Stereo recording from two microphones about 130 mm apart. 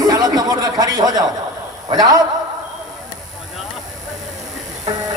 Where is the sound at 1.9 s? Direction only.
30° right (ahead or behind).